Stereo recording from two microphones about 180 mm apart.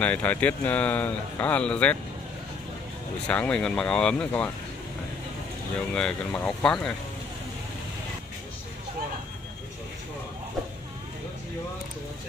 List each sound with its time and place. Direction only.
0.0 s speech: 10° left (ahead or behind)
3.3 s speech: 5° left (ahead or behind)
5.9 s speech: 5° left (ahead or behind)